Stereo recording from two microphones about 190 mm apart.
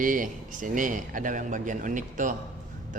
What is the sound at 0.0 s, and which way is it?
Speech, 45° right (ahead or behind).